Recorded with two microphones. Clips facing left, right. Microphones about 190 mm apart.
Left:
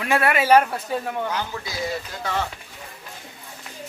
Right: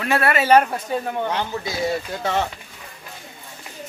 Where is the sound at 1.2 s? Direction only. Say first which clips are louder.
Right 3 dB; 30° right (ahead or behind).